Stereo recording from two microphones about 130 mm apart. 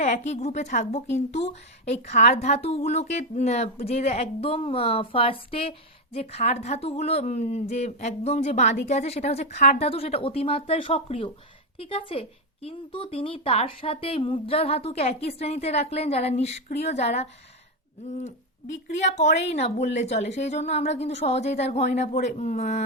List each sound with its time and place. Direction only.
0.0 s a woman's voice: 65° left (ahead or behind)
18.9 s a woman's voice: 65° left (ahead or behind)